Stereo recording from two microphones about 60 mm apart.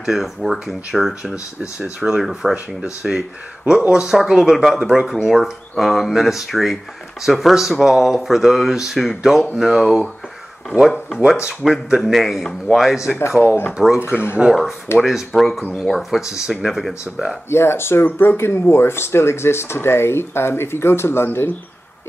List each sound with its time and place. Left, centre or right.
0.0 s speech: centre
2.5 s speech: right
3.1 s speech: centre
11.4 s speech: centre
13.3 s speech: right
14.0 s speech: left
14.5 s speech: centre
17.5 s speech: left